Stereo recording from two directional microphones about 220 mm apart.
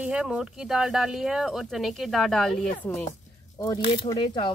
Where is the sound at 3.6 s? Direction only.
20° left (ahead or behind).